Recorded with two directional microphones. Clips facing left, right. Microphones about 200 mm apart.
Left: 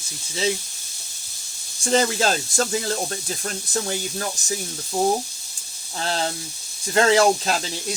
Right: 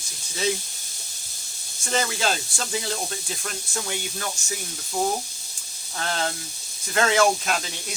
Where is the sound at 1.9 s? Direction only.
40° left (ahead or behind).